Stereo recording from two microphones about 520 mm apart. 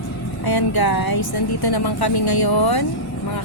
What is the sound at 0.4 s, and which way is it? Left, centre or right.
Speech, left.